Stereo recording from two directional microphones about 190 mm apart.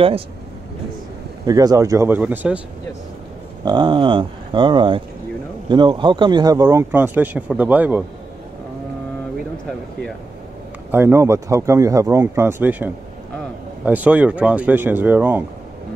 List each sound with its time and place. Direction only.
1.4 s speech: 20° right (ahead or behind)
3.6 s speech: 25° right (ahead or behind); by 8.0 s 10° right (ahead or behind)
10.9 s speech: 10° right (ahead or behind)